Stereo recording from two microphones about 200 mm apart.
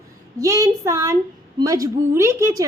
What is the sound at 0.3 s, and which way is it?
A woman's voice, 15° right (ahead or behind).